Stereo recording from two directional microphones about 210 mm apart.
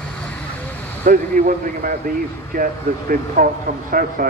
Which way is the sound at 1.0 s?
40° right (ahead or behind).